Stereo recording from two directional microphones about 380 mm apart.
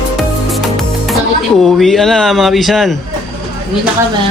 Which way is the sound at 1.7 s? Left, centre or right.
Centre.